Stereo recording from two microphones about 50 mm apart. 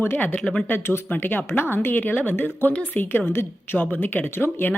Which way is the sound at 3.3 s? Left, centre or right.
Left.